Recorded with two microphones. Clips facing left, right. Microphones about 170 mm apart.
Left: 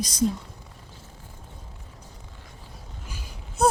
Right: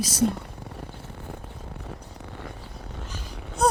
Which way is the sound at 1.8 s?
70° right (ahead or behind).